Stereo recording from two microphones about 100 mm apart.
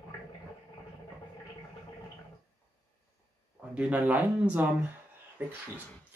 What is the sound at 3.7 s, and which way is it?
Speech, 15° right (ahead or behind).